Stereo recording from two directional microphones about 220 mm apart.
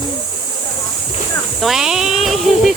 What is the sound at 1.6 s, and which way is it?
Speech, centre (ahead or behind).